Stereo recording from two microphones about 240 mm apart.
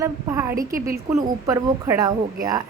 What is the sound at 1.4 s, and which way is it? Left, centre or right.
Speech, centre.